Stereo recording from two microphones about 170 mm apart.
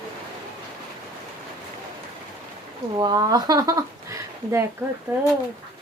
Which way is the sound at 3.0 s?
25° right (ahead or behind).